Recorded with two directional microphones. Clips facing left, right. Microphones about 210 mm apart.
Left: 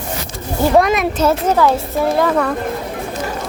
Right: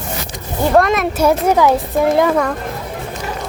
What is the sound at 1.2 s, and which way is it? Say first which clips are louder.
A woman's voice: right 2 dB; 15° right (ahead or behind).